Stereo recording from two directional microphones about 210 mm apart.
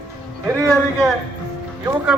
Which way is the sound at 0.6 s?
Centre (ahead or behind).